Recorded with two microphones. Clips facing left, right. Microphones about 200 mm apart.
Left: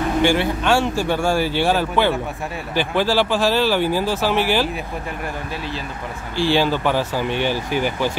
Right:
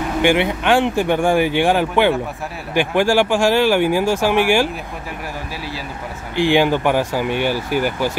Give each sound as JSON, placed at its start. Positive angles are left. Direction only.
{"t": 0.2, "sound": "speech", "side_deg": -15}
{"t": 6.3, "sound": "speech", "side_deg": -15}